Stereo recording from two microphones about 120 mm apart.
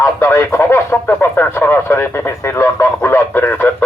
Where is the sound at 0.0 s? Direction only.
20° left (ahead or behind).